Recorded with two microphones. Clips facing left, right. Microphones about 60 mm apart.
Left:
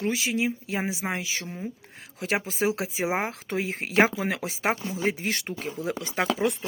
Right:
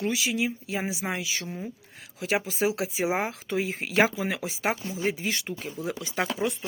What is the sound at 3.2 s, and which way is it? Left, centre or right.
Speech, left.